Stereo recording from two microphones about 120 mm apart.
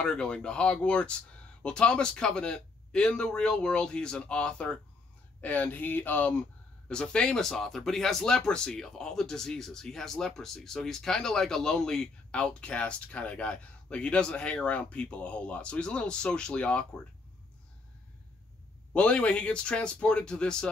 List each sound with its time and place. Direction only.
0.0 s speech: 5° left (ahead or behind)
18.9 s speech: 10° left (ahead or behind)